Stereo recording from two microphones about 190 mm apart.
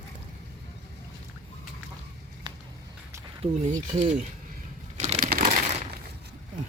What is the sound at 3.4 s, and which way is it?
Speech, 40° right (ahead or behind).